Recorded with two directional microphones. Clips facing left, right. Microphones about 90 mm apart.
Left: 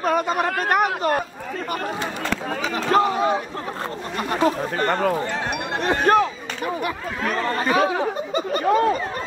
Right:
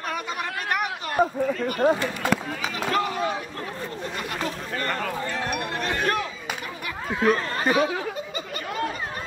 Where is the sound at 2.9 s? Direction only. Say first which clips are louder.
Left 8 dB; 30° left (ahead or behind).